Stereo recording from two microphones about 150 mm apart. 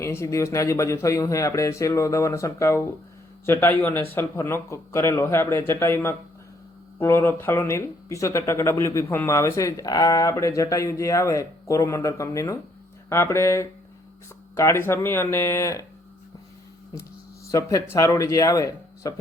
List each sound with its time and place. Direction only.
0.0 s speech: 20° left (ahead or behind)
16.9 s a sound: 90° left
17.5 s speech: 20° left (ahead or behind)